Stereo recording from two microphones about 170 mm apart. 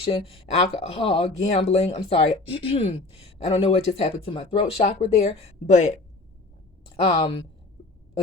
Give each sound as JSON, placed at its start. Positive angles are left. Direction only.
{"t": 0.0, "sound": "speech", "side_deg": 35}
{"t": 6.9, "sound": "speech", "side_deg": 30}